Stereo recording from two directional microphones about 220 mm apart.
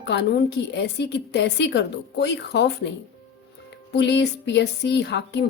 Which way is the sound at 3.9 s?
50° left (ahead or behind).